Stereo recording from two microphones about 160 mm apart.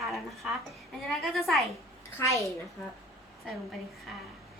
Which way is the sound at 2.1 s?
20° left (ahead or behind).